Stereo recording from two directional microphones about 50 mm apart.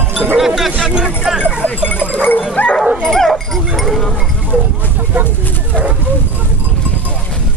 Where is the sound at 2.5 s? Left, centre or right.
Left.